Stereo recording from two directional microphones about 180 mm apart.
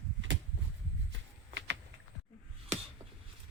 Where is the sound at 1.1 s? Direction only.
80° right.